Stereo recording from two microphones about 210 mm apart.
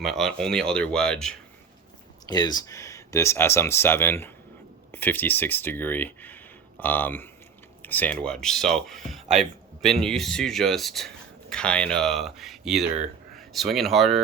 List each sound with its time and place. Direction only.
0.0 s speech: centre (ahead or behind)
2.2 s speech: 20° left (ahead or behind); by 14.2 s centre (ahead or behind)